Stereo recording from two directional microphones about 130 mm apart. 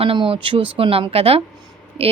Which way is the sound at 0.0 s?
45° right (ahead or behind).